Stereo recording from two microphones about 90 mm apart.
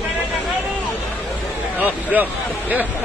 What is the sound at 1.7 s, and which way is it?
Speech, 20° right (ahead or behind).